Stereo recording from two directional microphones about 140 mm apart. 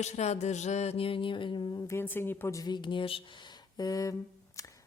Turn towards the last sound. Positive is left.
turn(degrees=20)  # may be behind; listen again after turning